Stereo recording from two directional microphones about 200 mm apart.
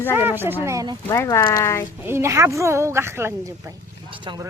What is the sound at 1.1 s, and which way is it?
Speech, 15° left (ahead or behind).